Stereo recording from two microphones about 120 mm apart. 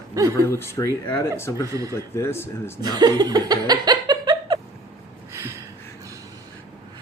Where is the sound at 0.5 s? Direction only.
20° left (ahead or behind).